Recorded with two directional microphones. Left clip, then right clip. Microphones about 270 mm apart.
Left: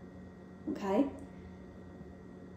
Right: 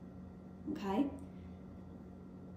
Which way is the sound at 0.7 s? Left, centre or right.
Centre.